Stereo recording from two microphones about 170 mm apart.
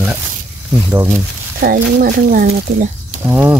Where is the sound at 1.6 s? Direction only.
55° right (ahead or behind).